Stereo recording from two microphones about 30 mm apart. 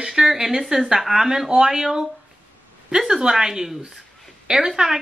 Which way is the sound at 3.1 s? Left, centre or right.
Right.